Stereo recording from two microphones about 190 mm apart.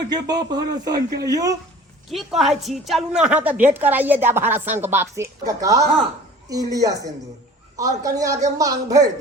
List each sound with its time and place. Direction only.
0.1 s a man's voice: 20° right (ahead or behind)
2.4 s a woman's voice: centre (ahead or behind); by 9.0 s 20° right (ahead or behind)